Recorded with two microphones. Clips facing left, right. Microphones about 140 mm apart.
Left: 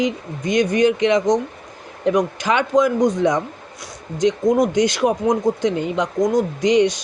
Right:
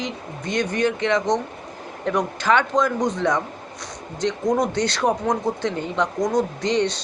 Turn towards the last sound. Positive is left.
turn(degrees=15)  # may be behind; listen again after turning